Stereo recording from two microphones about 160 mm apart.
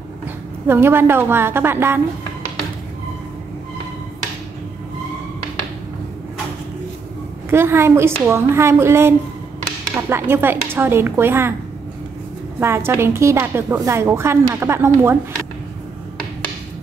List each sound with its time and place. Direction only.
0.7 s a woman's voice: 15° right (ahead or behind)
7.4 s a woman's voice: 15° right (ahead or behind)
12.5 s a woman's voice: 15° right (ahead or behind)